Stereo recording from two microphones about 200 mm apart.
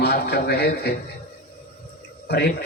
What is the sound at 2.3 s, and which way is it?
Speech, 55° left (ahead or behind).